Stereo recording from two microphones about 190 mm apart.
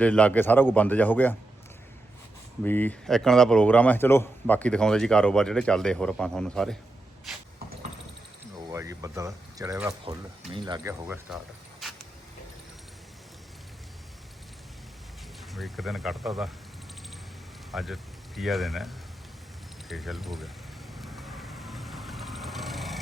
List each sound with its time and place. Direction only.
0.0 s speech: 5° left (ahead or behind)
2.6 s a man's voice: 10° left (ahead or behind)
8.7 s speech: 15° right (ahead or behind)
15.5 s a man's voice: centre (ahead or behind)
17.7 s a man's voice: centre (ahead or behind)
21.0 s vehicle: centre (ahead or behind)